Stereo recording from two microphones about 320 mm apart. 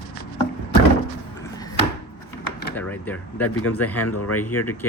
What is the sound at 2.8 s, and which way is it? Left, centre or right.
Speech, centre.